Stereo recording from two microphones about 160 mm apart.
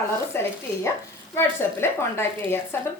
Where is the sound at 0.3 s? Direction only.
15° left (ahead or behind).